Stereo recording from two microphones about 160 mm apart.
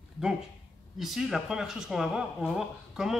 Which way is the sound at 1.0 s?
Centre (ahead or behind).